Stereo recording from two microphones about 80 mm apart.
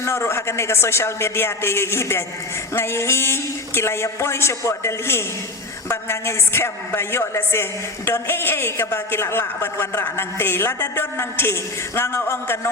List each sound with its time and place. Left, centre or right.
0.0 s a woman's voice: left